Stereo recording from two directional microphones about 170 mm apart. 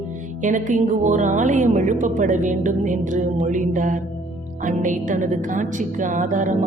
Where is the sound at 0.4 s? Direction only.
45° right (ahead or behind).